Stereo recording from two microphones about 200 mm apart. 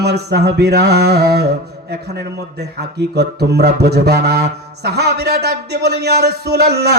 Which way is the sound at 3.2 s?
55° right (ahead or behind).